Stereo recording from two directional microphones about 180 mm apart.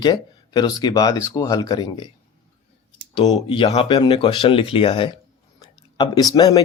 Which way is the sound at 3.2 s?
25° left (ahead or behind).